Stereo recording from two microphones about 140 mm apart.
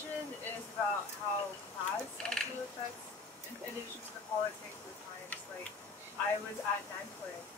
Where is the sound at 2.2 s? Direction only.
5° left (ahead or behind).